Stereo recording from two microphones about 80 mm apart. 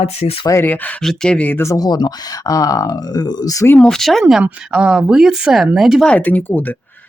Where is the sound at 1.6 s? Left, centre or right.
Left.